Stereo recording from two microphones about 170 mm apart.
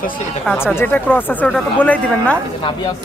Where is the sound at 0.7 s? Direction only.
10° left (ahead or behind).